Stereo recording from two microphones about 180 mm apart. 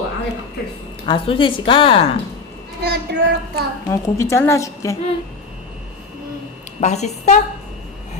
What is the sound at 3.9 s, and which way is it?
A woman's voice, 15° left (ahead or behind).